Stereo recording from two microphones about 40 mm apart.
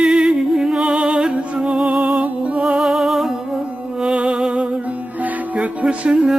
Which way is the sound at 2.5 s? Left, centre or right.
Centre.